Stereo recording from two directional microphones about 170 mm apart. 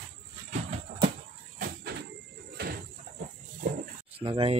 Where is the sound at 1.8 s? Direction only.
70° right (ahead or behind).